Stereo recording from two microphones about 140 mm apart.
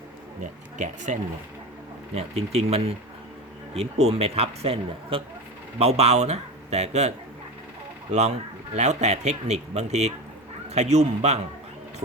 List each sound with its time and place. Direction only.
0.8 s speech: 60° right (ahead or behind)
2.1 s a man's voice: 50° right (ahead or behind)
8.1 s a man's voice: 50° right (ahead or behind)